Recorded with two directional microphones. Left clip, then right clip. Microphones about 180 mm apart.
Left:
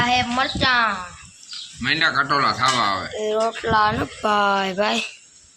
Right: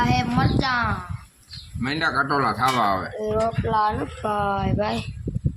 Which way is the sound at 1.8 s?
30° right (ahead or behind).